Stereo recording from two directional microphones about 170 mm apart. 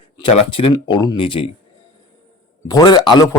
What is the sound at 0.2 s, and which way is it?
Speech, 35° left (ahead or behind).